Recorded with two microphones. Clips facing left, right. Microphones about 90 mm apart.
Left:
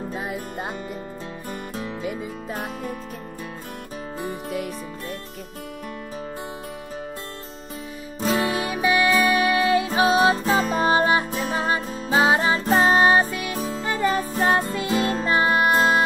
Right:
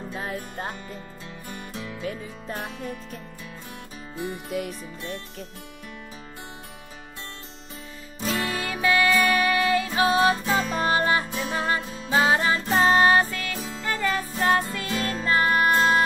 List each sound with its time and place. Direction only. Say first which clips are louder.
0.1 s music: left 3 dB; 10° left (ahead or behind)
1.5 s music: left 4 dB; 40° left (ahead or behind)
4.5 s music: left 2 dB; centre (ahead or behind)
8.4 s music: left 4 dB; 20° left (ahead or behind); by 10.8 s 35° left (ahead or behind)
10.8 s music: left 3 dB; 25° left (ahead or behind)
11.8 s music: left 3 dB; 35° left (ahead or behind)
12.9 s music: left 1 dB; 20° left (ahead or behind)
13.6 s music: left 7 dB; 35° left (ahead or behind)
13.8 s music: left 3 dB; 20° left (ahead or behind)
14.4 s music: left 1 dB; 35° left (ahead or behind)
14.7 s music: left 6 dB; 25° left (ahead or behind)